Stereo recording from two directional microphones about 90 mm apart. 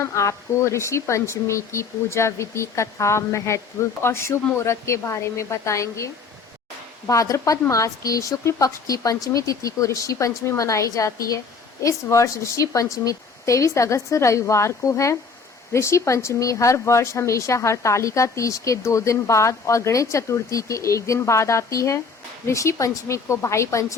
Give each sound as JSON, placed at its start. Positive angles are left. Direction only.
{"t": 0.0, "sound": "speech", "side_deg": 35}
{"t": 7.1, "sound": "speech", "side_deg": 35}